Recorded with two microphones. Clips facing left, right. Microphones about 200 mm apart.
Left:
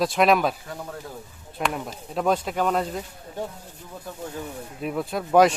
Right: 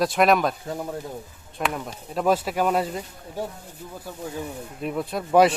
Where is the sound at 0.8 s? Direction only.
20° right (ahead or behind).